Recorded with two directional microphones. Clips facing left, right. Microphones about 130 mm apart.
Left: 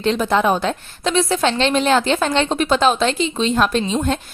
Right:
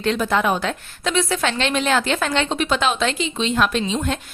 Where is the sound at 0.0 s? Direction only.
25° left (ahead or behind).